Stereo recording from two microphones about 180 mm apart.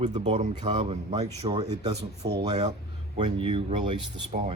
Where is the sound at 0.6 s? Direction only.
30° right (ahead or behind).